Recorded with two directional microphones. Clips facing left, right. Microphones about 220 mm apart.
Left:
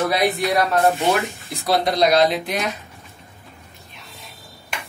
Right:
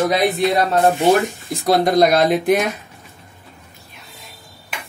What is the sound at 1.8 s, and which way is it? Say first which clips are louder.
Speech: right 2 dB; 50° right (ahead or behind).